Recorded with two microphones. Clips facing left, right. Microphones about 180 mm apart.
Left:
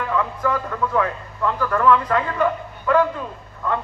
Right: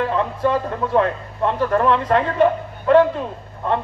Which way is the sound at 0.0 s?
30° right (ahead or behind).